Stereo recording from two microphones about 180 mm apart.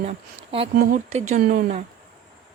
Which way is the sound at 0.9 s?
50° right (ahead or behind).